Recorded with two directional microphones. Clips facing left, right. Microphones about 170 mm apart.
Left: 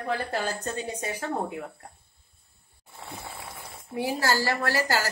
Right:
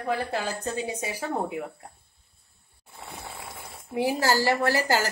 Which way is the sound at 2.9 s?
Centre (ahead or behind).